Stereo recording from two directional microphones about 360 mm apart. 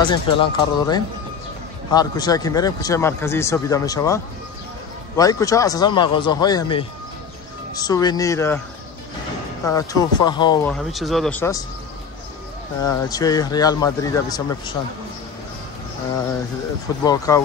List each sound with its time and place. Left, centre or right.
0.1 s speech: centre
9.7 s speech: centre
12.8 s speech: centre
17.0 s speech: centre